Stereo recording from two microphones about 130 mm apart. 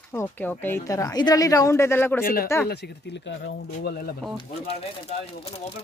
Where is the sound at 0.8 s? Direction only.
25° left (ahead or behind).